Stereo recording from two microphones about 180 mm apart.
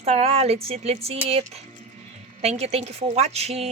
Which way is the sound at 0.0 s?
35° right (ahead or behind).